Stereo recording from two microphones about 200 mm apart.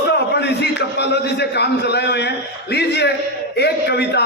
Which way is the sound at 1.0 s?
55° left (ahead or behind).